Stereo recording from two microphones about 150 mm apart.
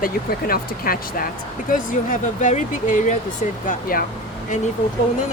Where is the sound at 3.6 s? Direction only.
70° left (ahead or behind).